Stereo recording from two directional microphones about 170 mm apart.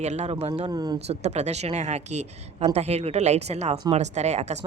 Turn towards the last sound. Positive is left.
turn(degrees=-40)  # may be behind; listen again after turning